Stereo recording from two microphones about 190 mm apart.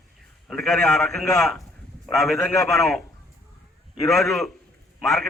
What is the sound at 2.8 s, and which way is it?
A man's voice, centre (ahead or behind).